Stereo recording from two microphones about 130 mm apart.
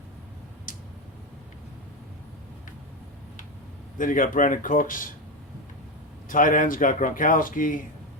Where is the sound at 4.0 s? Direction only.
90° left.